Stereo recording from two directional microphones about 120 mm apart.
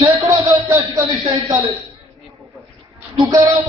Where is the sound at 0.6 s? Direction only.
30° right (ahead or behind).